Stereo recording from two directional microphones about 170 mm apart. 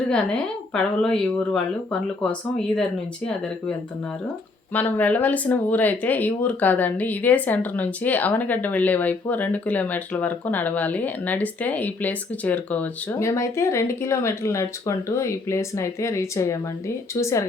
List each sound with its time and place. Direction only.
0.7 s speech: 5° left (ahead or behind)
4.7 s speech: 10° left (ahead or behind)